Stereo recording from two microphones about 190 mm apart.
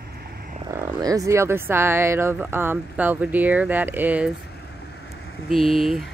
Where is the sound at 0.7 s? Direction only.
15° right (ahead or behind).